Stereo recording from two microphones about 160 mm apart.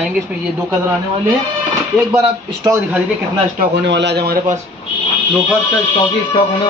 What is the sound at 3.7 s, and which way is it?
Speech, 90° right.